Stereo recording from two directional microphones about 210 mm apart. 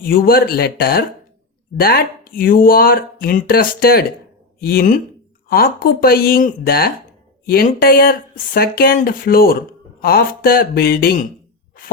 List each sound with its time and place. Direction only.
0.0 s speech: 45° left (ahead or behind)